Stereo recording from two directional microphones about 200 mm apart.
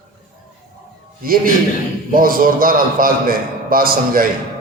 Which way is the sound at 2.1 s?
45° right (ahead or behind).